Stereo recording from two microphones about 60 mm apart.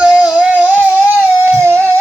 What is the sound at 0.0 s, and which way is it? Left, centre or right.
Music, centre.